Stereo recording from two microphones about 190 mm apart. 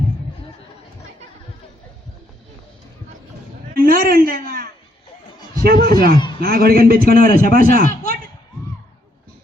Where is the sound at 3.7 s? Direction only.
50° right (ahead or behind).